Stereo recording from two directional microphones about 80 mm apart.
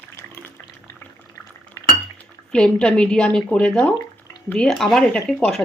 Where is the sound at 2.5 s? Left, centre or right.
Centre.